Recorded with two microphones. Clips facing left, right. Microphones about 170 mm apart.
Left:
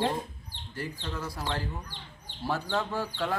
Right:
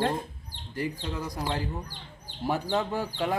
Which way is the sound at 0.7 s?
15° right (ahead or behind).